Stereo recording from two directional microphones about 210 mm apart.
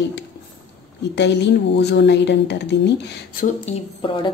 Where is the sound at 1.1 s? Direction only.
55° left (ahead or behind).